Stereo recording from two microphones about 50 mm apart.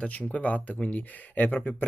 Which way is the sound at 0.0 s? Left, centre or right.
Left.